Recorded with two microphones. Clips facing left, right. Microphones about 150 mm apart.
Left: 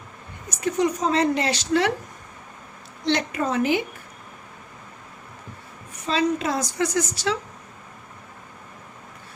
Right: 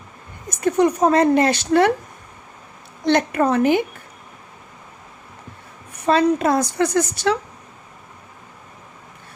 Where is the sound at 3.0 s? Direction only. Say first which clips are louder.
Right 6 dB; 55° right (ahead or behind).